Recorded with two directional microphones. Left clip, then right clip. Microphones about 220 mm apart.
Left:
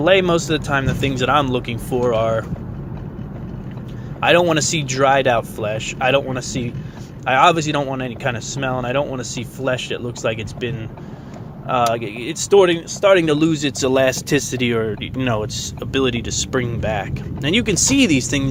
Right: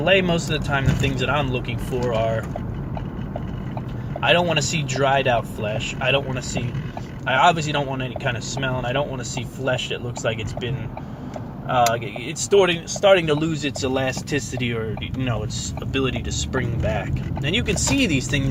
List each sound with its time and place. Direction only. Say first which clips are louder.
0.0 s speech: left 4 dB; 45° left (ahead or behind)
4.2 s speech: left 4 dB; 45° left (ahead or behind)
11.7 s speech: left 1 dB; 45° left (ahead or behind)